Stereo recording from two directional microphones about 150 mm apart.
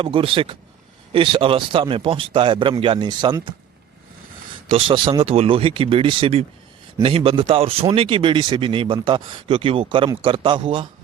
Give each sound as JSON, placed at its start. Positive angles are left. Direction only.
{"t": 0.0, "sound": "speech", "side_deg": -35}
{"t": 4.7, "sound": "speech", "side_deg": -30}